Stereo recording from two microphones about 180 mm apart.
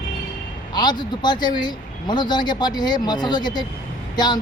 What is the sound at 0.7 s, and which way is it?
Speech, 25° left (ahead or behind).